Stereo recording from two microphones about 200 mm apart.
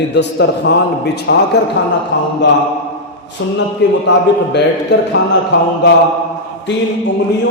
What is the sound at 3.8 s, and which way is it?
Speech, 65° left (ahead or behind).